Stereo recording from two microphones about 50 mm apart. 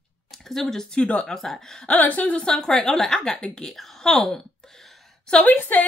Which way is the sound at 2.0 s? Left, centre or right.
Left.